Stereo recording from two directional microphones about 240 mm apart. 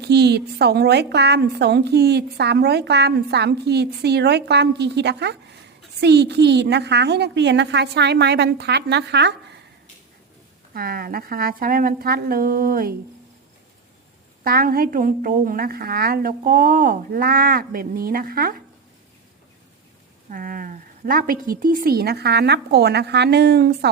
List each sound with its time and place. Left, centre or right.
0.0 s a woman's voice: right
10.8 s a woman's voice: right
14.4 s a woman's voice: right
20.3 s a woman's voice: right